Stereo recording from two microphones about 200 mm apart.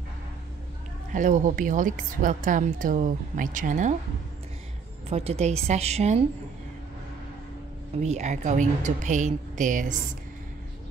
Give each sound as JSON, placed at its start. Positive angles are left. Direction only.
{"t": 1.1, "sound": "a woman's voice", "side_deg": -40}
{"t": 5.1, "sound": "a woman's voice", "side_deg": -30}
{"t": 8.0, "sound": "a woman's voice", "side_deg": -35}